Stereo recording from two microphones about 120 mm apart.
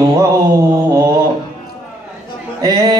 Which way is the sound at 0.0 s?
35° right (ahead or behind).